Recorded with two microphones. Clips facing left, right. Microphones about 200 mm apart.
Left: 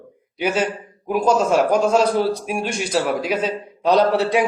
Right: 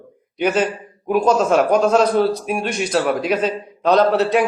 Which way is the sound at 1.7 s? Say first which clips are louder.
Right 2 dB; 5° left (ahead or behind).